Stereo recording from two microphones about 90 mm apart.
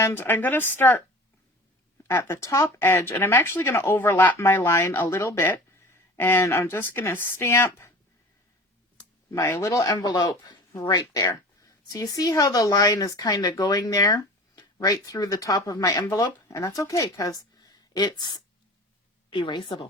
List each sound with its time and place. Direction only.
0.0 s speech: 25° left (ahead or behind)
2.0 s speech: 30° left (ahead or behind)
9.3 s a woman's voice: 35° left (ahead or behind); by 19.9 s 65° left (ahead or behind)